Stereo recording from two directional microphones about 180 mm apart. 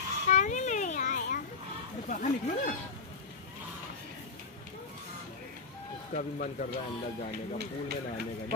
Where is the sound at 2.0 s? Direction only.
45° left (ahead or behind).